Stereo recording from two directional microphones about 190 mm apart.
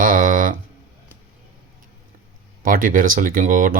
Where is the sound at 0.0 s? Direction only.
45° right (ahead or behind).